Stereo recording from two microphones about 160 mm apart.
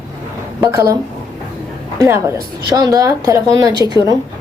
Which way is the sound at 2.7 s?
20° right (ahead or behind).